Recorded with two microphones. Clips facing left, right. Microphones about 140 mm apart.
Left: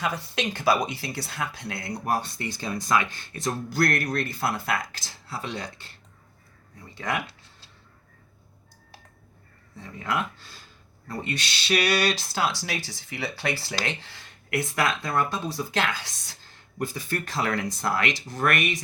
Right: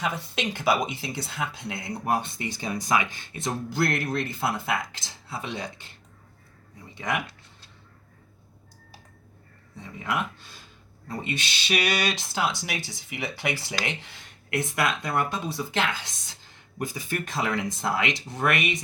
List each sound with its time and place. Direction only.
0.0 s speech: 20° right (ahead or behind)
9.7 s speech: 20° right (ahead or behind)